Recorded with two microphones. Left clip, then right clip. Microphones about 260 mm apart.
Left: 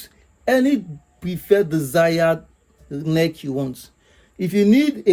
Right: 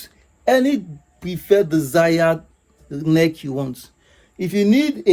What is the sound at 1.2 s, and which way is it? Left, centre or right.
Speech, centre.